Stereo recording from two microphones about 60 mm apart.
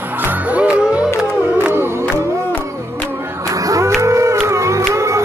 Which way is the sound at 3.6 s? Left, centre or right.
Right.